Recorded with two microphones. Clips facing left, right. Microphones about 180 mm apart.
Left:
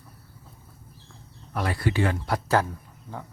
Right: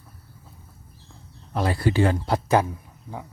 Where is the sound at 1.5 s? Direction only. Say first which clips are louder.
Right 4 dB; 30° right (ahead or behind).